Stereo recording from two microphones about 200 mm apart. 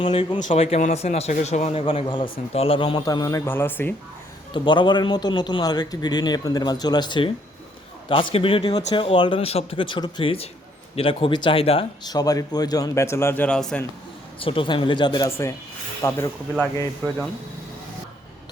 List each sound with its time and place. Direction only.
0.0 s a man's voice: 25° left (ahead or behind); by 3.9 s 10° left (ahead or behind)
4.5 s speech: 25° left (ahead or behind); by 13.8 s 5° left (ahead or behind)
14.3 s speech: 25° left (ahead or behind)